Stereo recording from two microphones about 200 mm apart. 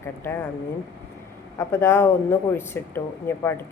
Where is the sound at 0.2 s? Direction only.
10° left (ahead or behind).